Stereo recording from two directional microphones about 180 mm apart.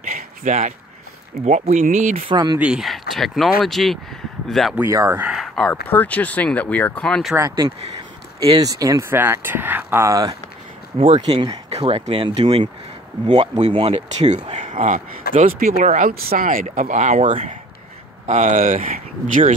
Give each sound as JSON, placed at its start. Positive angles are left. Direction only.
{"t": 0.1, "sound": "a sound", "side_deg": -40}
{"t": 1.4, "sound": "speech", "side_deg": -40}
{"t": 2.3, "sound": "speech", "side_deg": -25}
{"t": 2.6, "sound": "speech", "side_deg": -5}
{"t": 4.8, "sound": "speech", "side_deg": -15}
{"t": 5.2, "sound": "a sound", "side_deg": 0}
{"t": 5.9, "sound": "speech", "side_deg": 10}
{"t": 7.3, "sound": "speech", "side_deg": -20}
{"t": 11.0, "sound": "speech", "side_deg": -30}
{"t": 18.2, "sound": "speech", "side_deg": -45}